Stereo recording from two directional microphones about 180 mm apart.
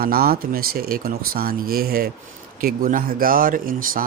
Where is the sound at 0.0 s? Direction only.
55° right (ahead or behind).